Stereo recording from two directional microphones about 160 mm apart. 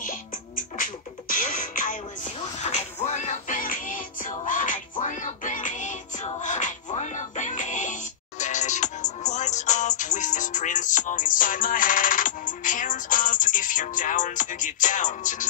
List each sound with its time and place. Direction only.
0.0 s music: 55° left (ahead or behind)